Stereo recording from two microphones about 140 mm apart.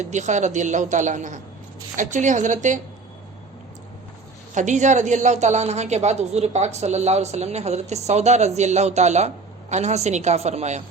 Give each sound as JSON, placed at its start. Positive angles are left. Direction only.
{"t": 0.0, "sound": "a woman's voice", "side_deg": -55}
{"t": 4.5, "sound": "a woman's voice", "side_deg": -60}